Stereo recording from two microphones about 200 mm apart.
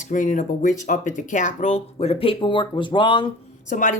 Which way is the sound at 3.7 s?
40° left (ahead or behind).